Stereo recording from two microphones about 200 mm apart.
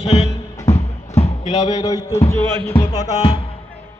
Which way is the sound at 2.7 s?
25° left (ahead or behind).